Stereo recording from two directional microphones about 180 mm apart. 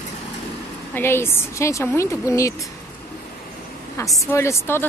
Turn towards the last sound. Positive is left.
turn(degrees=15)  # may be behind; listen again after turning